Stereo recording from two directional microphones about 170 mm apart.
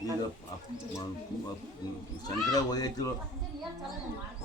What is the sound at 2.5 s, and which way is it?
Speech, 20° left (ahead or behind).